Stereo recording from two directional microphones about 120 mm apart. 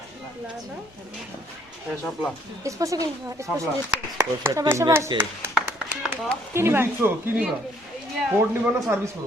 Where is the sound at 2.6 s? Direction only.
25° right (ahead or behind).